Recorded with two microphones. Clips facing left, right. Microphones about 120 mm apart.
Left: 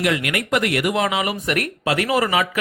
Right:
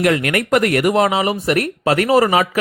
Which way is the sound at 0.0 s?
45° right (ahead or behind).